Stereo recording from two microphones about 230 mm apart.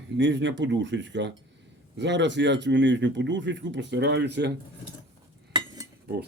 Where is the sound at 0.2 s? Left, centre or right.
Right.